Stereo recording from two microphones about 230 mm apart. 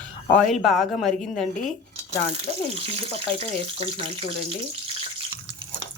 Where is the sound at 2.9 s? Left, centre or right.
Right.